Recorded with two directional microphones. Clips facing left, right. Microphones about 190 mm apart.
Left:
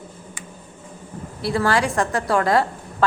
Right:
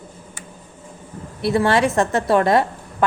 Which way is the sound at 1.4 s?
20° right (ahead or behind).